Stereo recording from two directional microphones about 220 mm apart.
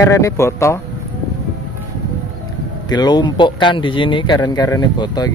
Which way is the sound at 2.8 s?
20° left (ahead or behind).